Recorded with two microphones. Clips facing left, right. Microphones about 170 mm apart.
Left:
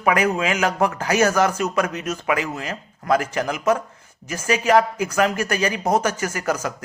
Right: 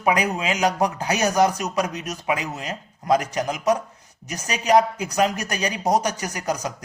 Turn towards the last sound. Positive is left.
turn(degrees=-15)  # may be behind; listen again after turning